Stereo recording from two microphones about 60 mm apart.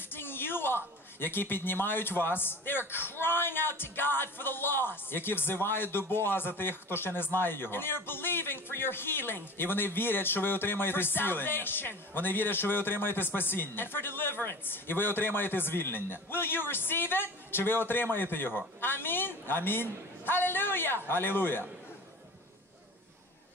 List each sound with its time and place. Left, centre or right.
0.1 s a man's voice: left